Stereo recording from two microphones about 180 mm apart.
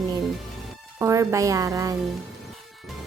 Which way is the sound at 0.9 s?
15° right (ahead or behind).